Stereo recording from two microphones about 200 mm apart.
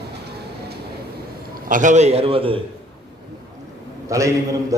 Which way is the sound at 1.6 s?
40° right (ahead or behind).